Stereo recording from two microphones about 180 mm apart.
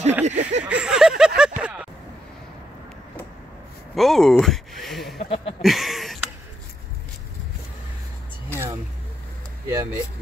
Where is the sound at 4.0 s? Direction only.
Centre (ahead or behind).